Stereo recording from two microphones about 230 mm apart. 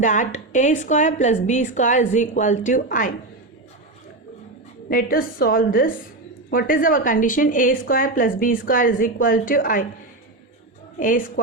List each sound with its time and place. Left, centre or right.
0.0 s a woman's voice: left
4.9 s a woman's voice: left
11.0 s a woman's voice: left